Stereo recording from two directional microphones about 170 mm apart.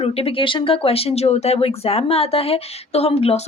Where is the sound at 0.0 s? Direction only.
35° left (ahead or behind).